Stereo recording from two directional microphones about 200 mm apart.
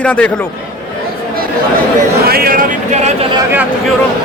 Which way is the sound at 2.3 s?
45° right (ahead or behind).